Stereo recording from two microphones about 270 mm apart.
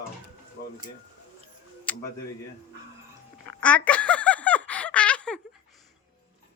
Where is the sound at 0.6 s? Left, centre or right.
Left.